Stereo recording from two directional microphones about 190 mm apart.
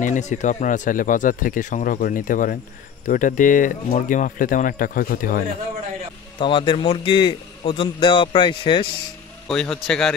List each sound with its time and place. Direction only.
0.0 s speech: 40° left (ahead or behind)
6.4 s a man's voice: 25° left (ahead or behind)
9.5 s a man's voice: 5° left (ahead or behind)